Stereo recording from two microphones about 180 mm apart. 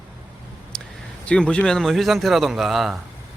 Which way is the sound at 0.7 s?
5° left (ahead or behind).